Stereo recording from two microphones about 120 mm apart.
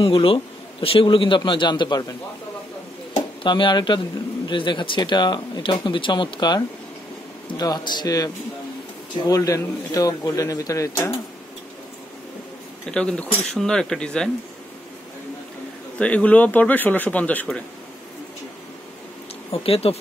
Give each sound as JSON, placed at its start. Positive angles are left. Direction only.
{"t": 0.0, "sound": "a man's voice", "side_deg": 50}
{"t": 3.4, "sound": "a man's voice", "side_deg": 40}
{"t": 12.9, "sound": "speech", "side_deg": 10}
{"t": 16.0, "sound": "speech", "side_deg": 10}
{"t": 19.5, "sound": "speech", "side_deg": 55}